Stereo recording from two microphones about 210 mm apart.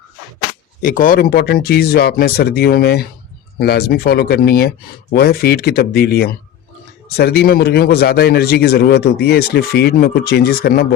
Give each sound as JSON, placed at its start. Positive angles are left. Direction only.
{"t": 0.8, "sound": "a man's voice", "side_deg": 40}